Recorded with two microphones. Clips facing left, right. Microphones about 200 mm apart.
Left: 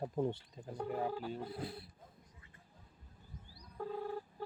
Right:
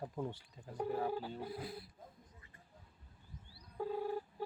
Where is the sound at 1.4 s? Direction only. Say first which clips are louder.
Left 1 dB; 30° left (ahead or behind).